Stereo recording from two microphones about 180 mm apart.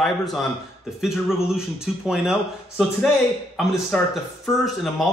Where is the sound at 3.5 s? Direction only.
5° left (ahead or behind).